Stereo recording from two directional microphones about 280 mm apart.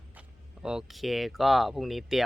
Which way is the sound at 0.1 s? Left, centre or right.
Centre.